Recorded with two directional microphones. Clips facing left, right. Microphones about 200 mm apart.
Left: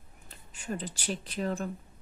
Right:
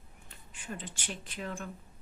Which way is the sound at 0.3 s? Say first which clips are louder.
Left 6 dB; 40° left (ahead or behind).